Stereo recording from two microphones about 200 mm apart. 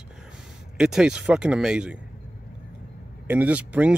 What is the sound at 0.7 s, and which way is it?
Speech, 5° right (ahead or behind).